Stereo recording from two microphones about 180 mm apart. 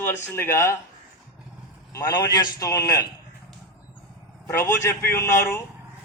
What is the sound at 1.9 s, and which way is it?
A man's voice, 20° left (ahead or behind).